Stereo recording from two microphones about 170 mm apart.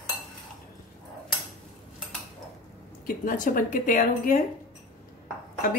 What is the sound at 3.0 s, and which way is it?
A woman's voice, 55° left (ahead or behind).